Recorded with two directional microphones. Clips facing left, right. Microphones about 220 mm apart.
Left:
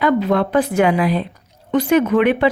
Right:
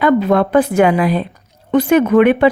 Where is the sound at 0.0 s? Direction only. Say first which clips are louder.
Right 3 dB; 50° right (ahead or behind).